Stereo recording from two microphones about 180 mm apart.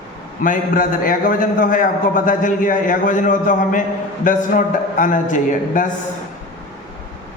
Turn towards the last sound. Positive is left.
turn(degrees=45)  # may be behind; listen again after turning